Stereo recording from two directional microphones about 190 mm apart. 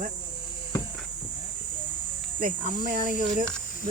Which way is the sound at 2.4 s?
50° right (ahead or behind).